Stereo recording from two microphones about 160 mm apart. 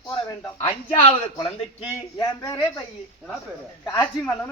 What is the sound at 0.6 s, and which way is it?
Speech, 35° left (ahead or behind).